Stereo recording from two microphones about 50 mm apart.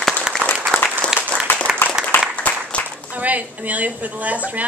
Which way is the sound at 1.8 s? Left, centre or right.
Left.